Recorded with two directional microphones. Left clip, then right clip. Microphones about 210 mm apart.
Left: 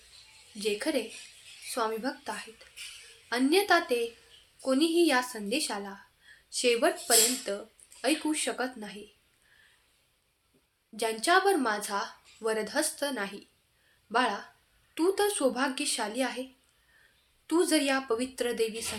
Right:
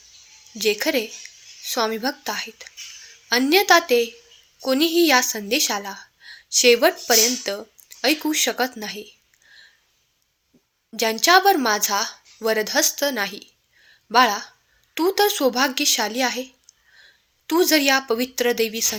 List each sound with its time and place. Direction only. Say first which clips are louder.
0.6 s a woman's voice: right 9 dB; 40° right (ahead or behind)
10.9 s a woman's voice: right 9 dB; 40° right (ahead or behind)